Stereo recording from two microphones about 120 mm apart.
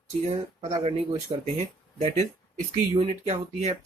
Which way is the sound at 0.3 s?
70° right (ahead or behind).